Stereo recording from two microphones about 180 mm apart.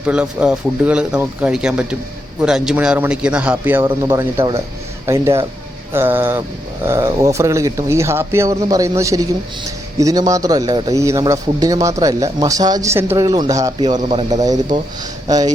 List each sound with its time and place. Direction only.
0.0 s speech: 5° right (ahead or behind)